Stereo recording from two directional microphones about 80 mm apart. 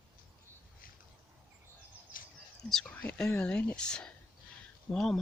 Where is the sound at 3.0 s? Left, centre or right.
Centre.